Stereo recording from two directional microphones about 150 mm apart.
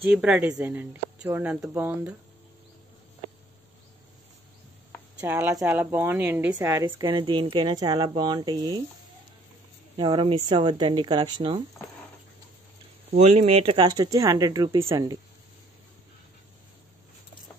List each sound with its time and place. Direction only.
0.1 s a woman's voice: 10° right (ahead or behind)
5.2 s a woman's voice: 15° right (ahead or behind)
6.9 s speech: 30° right (ahead or behind)
9.9 s speech: 30° right (ahead or behind)
13.1 s speech: 50° right (ahead or behind); by 15.1 s 30° right (ahead or behind)